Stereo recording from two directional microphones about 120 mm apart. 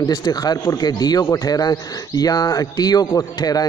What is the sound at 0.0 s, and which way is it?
A man's voice, 35° left (ahead or behind).